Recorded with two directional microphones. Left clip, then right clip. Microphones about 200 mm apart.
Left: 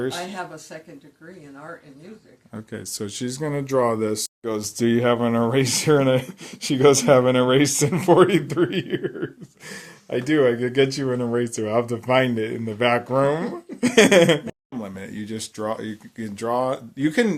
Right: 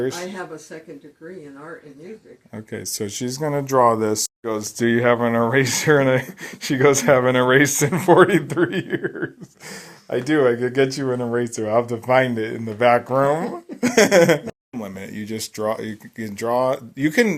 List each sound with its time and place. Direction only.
2.5 s speech: 5° left (ahead or behind)
4.4 s speech: 10° left (ahead or behind); by 17.3 s 5° right (ahead or behind)